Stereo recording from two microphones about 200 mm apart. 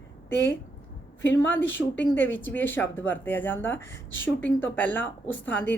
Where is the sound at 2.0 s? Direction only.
10° left (ahead or behind).